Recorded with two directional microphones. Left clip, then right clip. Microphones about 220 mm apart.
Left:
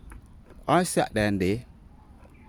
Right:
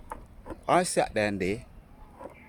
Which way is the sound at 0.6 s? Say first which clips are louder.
Left 1 dB; 30° left (ahead or behind).